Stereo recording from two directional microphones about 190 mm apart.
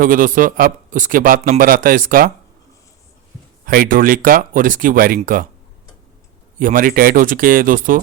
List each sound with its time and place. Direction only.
0.0 s a man's voice: 45° right (ahead or behind)
3.7 s a man's voice: 50° right (ahead or behind)
6.6 s a man's voice: 45° right (ahead or behind)